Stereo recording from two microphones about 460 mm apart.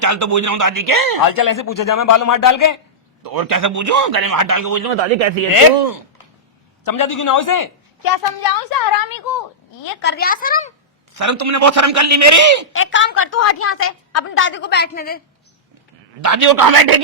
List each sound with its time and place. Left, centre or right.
0.0 s a man's voice: right
1.4 s speech: left
3.2 s a man's voice: right
5.0 s speech: right
6.8 s a woman's voice: left
10.0 s a woman's voice: left
11.2 s a man's voice: right
12.7 s a woman's voice: left
16.2 s a man's voice: right